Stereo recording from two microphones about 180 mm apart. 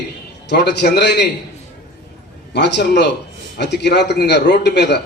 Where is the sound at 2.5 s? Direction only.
70° left (ahead or behind).